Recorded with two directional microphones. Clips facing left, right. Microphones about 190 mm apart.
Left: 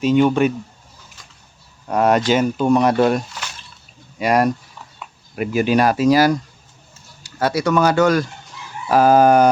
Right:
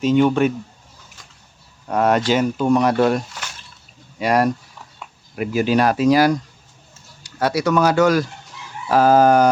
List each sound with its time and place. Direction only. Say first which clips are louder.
0.0 s speech: left 1 dB; 10° left (ahead or behind)
1.9 s speech: left 1 dB; 15° left (ahead or behind)
4.2 s speech: left 1 dB; 15° left (ahead or behind); by 8.3 s centre (ahead or behind)
8.9 s speech: left 1 dB; 15° left (ahead or behind)